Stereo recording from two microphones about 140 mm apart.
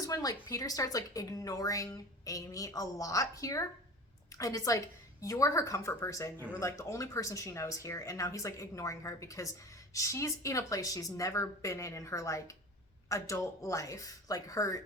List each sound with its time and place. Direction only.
0.0 s a woman's voice: 25° left (ahead or behind)